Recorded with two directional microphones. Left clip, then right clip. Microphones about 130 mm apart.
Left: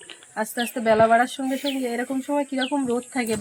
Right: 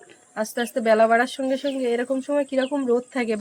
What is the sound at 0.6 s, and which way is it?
Speech, 45° right (ahead or behind).